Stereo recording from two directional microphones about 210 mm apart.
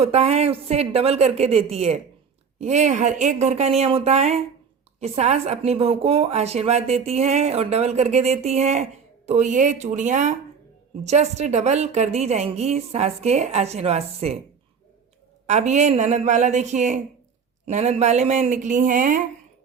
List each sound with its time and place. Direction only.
0.0 s a woman's voice: 30° right (ahead or behind)
15.4 s a woman's voice: 35° right (ahead or behind)